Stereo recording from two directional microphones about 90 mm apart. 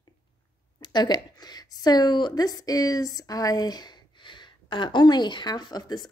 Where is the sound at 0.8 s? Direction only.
55° left (ahead or behind).